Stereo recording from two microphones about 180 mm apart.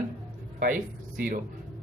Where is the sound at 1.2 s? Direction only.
50° right (ahead or behind).